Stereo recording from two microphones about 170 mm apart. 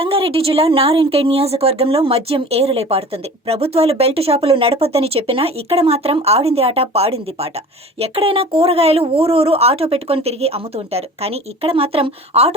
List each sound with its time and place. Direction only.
0.0 s speech: 35° right (ahead or behind)